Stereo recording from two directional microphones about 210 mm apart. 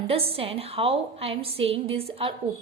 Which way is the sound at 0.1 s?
25° right (ahead or behind).